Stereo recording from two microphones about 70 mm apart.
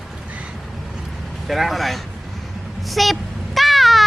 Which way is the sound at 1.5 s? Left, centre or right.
Centre.